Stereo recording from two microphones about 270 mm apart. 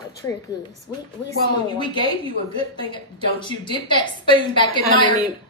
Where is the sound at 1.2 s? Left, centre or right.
Centre.